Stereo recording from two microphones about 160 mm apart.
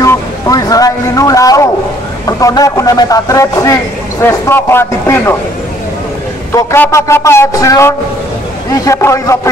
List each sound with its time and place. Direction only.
0.0 s a sound: 20° left (ahead or behind)
2.2 s speech: 20° left (ahead or behind)
6.5 s speech: 15° left (ahead or behind)